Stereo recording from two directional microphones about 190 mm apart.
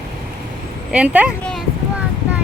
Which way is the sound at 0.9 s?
5° right (ahead or behind).